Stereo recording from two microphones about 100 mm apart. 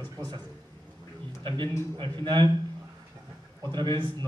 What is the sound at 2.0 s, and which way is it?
Speech, 50° right (ahead or behind).